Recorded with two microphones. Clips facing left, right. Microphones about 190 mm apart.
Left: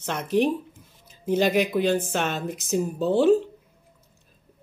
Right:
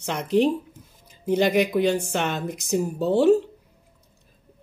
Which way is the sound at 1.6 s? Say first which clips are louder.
Right 1 dB; 15° right (ahead or behind).